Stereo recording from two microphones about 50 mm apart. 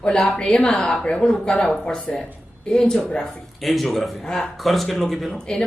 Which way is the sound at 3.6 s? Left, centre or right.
Centre.